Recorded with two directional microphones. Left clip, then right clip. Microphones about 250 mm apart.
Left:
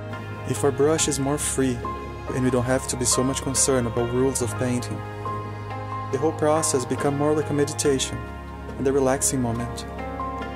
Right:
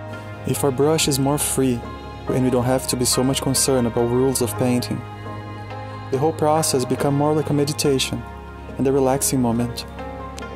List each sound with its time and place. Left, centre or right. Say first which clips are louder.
0.5 s speech: right 2 dB; right
6.0 s speech: right 3 dB; right